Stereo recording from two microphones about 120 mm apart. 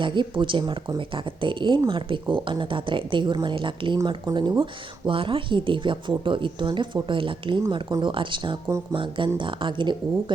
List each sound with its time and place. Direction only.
0.0 s speech: 40° right (ahead or behind)